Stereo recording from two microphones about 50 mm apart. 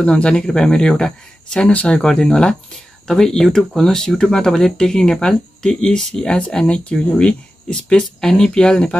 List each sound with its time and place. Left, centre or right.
0.0 s speech: left